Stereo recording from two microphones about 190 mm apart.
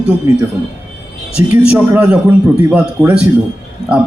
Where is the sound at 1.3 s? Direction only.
5° right (ahead or behind).